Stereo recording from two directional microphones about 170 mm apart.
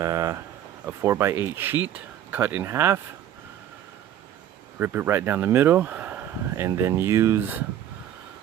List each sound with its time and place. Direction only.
0.0 s a sound: 20° right (ahead or behind)
0.9 s speech: 15° right (ahead or behind)
4.8 s speech: 15° right (ahead or behind)